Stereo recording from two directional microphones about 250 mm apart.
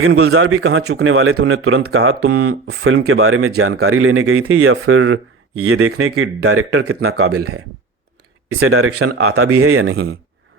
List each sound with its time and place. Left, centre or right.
0.0 s speech: right